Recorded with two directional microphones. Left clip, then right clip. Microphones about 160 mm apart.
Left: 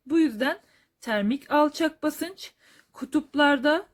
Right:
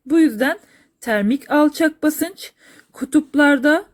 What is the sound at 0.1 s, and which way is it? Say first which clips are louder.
A woman's voice: right 8 dB; 25° right (ahead or behind).